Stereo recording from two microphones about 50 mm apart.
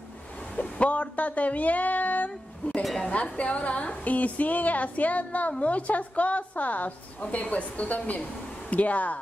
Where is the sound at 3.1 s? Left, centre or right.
Left.